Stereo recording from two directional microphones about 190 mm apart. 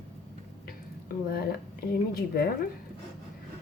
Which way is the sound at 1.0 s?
50° left (ahead or behind).